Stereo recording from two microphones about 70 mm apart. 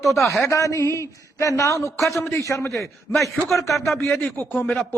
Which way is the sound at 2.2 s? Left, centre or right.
Left.